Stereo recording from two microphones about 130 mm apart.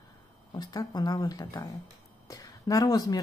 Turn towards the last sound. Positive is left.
turn(degrees=30)  # may be behind; listen again after turning